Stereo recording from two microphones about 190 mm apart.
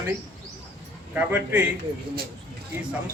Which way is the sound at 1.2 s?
5° right (ahead or behind).